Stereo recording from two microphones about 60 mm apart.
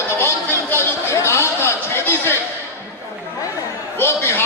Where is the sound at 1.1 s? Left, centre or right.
Left.